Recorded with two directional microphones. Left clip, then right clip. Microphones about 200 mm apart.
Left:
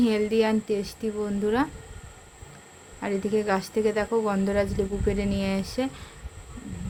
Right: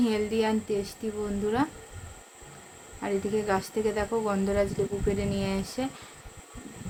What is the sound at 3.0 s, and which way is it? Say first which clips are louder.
Speech: left 2 dB; 20° left (ahead or behind).